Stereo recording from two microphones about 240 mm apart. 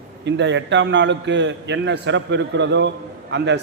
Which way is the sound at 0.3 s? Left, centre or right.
Right.